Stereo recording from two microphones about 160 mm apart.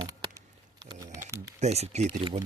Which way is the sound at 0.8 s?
25° right (ahead or behind).